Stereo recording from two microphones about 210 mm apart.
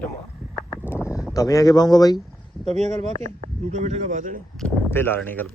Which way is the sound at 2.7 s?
30° right (ahead or behind).